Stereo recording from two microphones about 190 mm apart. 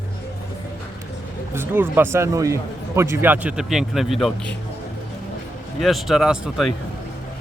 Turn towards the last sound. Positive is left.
turn(degrees=0)  # may be behind; listen again after turning